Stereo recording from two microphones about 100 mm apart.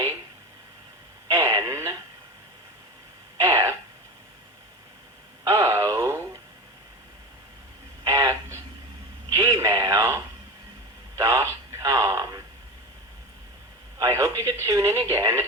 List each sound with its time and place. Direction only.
1.3 s radio: 30° right (ahead or behind)
3.3 s throat clearing: 30° right (ahead or behind)
5.5 s radio: 30° right (ahead or behind)
8.0 s a sound: 35° right (ahead or behind)
11.2 s radio: 30° right (ahead or behind)
14.0 s radio: 30° right (ahead or behind)